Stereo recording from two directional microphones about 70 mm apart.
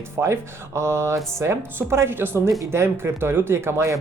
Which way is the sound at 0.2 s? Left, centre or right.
Right.